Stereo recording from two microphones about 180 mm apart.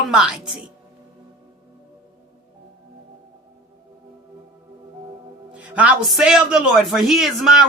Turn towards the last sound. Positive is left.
turn(degrees=0)  # may be behind; listen again after turning